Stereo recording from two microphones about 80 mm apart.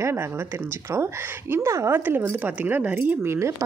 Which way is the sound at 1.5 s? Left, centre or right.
Right.